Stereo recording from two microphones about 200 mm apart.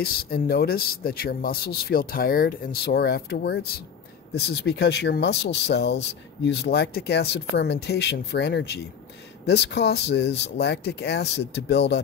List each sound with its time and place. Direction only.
0.0 s speech: 50° left (ahead or behind)